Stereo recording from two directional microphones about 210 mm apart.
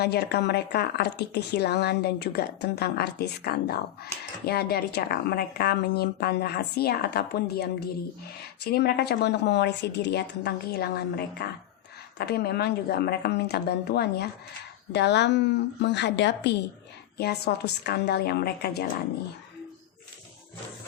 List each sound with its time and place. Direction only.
0.0 s a woman's voice: 50° left (ahead or behind)